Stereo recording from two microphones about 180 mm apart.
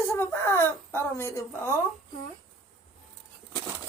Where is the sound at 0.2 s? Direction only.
15° left (ahead or behind).